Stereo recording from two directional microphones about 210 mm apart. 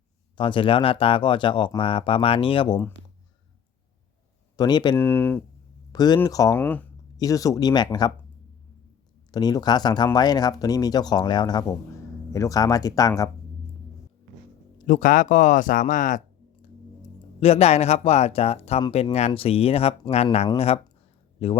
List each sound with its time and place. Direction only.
0.3 s speech: 25° left (ahead or behind)
4.5 s speech: 20° left (ahead or behind)
5.0 s speech: 10° left (ahead or behind)
9.3 s speech: 20° left (ahead or behind)
14.8 s speech: 40° left (ahead or behind)
17.4 s speech: 30° left (ahead or behind)